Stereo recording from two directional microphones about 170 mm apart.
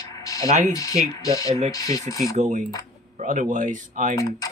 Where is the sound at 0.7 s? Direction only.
20° left (ahead or behind).